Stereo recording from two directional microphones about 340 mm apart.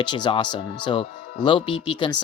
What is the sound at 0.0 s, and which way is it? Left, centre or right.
Speech, centre.